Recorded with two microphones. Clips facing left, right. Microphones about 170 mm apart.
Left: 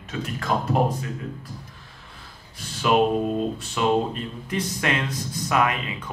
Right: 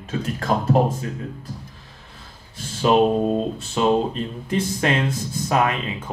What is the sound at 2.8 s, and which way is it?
Speech, 30° right (ahead or behind).